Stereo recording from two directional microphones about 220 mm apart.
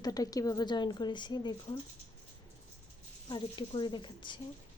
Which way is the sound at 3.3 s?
20° left (ahead or behind).